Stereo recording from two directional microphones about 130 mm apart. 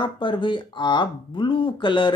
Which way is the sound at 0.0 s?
40° left (ahead or behind).